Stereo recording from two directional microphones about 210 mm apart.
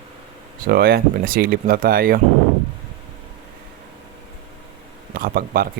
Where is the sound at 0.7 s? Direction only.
45° right (ahead or behind).